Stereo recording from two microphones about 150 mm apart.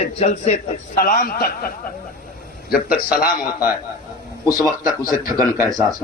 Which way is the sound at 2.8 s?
75° left (ahead or behind).